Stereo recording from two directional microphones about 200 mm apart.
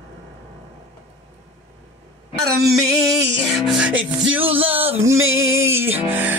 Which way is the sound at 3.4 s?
Centre (ahead or behind).